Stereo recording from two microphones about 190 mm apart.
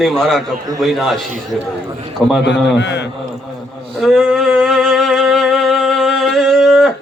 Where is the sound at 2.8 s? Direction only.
65° left (ahead or behind).